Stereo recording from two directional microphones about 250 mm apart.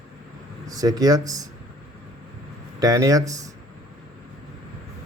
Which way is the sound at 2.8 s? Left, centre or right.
Centre.